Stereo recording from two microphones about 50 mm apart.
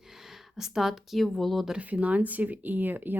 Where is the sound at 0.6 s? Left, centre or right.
Centre.